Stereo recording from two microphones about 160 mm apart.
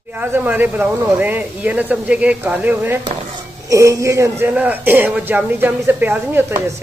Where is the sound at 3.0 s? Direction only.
35° right (ahead or behind).